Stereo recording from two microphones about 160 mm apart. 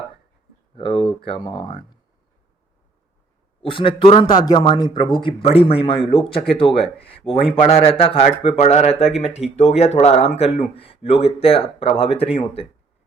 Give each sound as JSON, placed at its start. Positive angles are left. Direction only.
{"t": 0.8, "sound": "speech", "side_deg": 30}
{"t": 3.6, "sound": "speech", "side_deg": 30}